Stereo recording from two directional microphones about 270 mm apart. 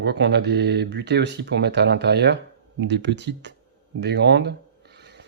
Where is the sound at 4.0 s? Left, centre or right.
Right.